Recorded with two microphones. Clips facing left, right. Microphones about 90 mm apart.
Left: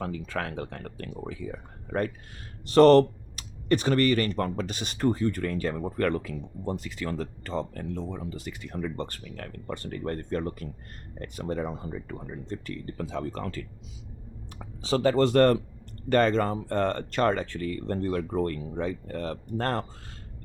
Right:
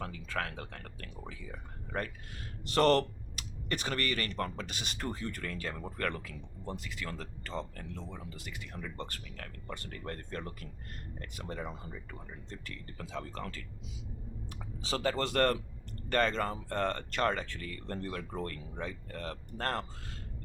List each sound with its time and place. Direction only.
0.0 s speech: 30° left (ahead or behind)
14.8 s speech: 35° left (ahead or behind)